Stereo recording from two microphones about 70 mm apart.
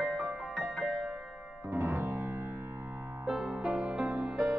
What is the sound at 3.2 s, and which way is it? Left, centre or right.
Music, centre.